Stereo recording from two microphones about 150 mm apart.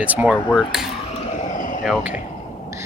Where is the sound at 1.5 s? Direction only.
60° left (ahead or behind).